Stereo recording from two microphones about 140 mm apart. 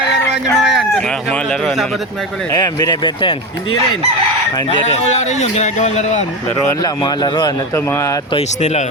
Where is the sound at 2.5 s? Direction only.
30° left (ahead or behind); by 6.2 s 55° left (ahead or behind).